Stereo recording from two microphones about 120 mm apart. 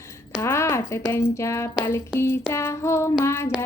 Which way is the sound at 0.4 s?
20° left (ahead or behind).